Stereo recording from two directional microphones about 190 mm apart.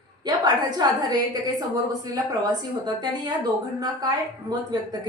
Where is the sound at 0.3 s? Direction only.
20° right (ahead or behind).